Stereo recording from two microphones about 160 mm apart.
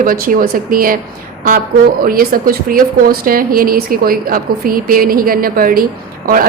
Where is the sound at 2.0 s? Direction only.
65° right (ahead or behind).